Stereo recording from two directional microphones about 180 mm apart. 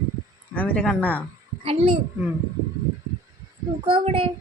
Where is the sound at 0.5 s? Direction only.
10° left (ahead or behind).